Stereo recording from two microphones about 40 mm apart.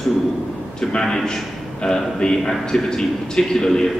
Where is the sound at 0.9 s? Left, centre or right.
Centre.